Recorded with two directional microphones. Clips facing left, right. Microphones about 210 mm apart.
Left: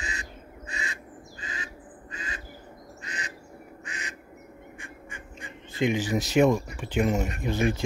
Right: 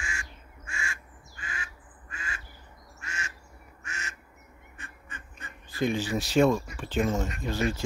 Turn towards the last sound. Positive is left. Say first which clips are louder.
# left 3 dB
turn(degrees=15)  # may be behind; listen again after turning